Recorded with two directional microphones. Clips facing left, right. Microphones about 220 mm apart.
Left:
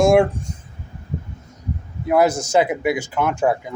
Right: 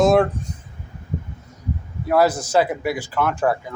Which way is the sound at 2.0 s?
20° left (ahead or behind).